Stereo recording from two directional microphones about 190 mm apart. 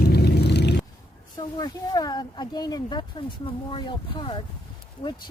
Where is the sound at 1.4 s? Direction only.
20° left (ahead or behind).